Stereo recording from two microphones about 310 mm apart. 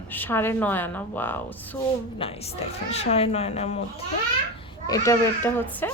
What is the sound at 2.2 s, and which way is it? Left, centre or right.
Speech, centre.